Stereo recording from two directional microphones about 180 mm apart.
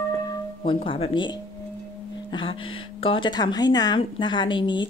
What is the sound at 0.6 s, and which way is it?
Speech, 30° left (ahead or behind).